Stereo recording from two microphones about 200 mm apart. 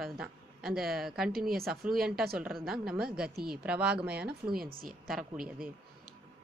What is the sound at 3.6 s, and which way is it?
Speech, 5° right (ahead or behind).